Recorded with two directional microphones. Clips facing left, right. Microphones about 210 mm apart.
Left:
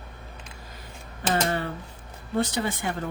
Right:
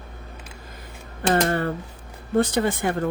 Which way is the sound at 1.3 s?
55° right (ahead or behind).